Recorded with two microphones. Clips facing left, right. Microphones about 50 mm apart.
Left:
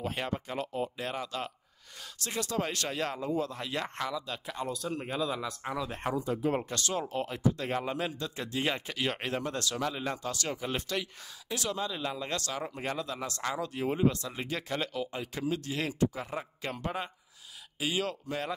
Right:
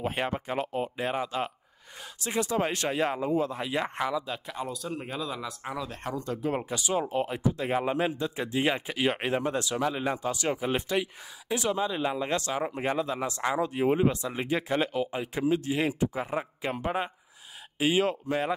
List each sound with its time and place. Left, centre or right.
0.0 s speech: right
4.6 s speech: centre
6.5 s speech: centre